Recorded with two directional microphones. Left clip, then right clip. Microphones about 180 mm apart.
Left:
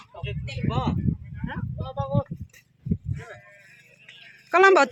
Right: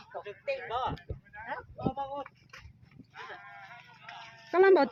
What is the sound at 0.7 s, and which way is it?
Speech, 35° right (ahead or behind).